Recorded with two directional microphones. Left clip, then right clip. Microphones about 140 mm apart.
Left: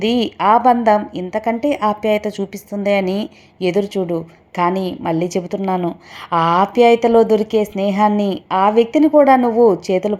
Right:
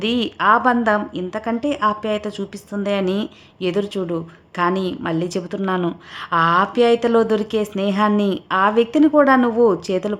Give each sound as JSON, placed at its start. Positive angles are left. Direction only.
{"t": 0.0, "sound": "a woman's voice", "side_deg": 10}
{"t": 9.4, "sound": "a woman's voice", "side_deg": -20}
{"t": 9.8, "sound": "a woman's voice", "side_deg": 5}